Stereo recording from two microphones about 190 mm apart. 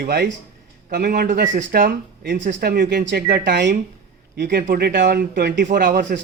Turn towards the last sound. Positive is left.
turn(degrees=-45)  # may be behind; listen again after turning